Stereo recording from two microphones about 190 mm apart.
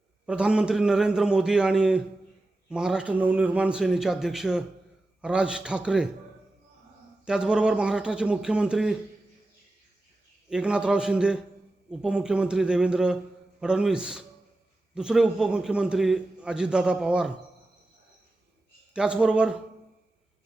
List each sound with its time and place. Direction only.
0.3 s a man's voice: 5° right (ahead or behind)
7.3 s a man's voice: 5° right (ahead or behind)
10.5 s a man's voice: 5° right (ahead or behind)
18.9 s a man's voice: 5° right (ahead or behind)